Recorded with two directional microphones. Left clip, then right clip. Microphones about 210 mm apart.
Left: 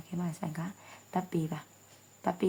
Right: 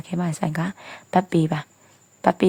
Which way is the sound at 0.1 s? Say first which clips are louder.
Right 13 dB; 40° right (ahead or behind).